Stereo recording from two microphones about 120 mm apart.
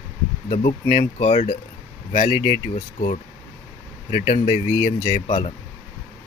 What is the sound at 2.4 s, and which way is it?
Speech, 50° left (ahead or behind).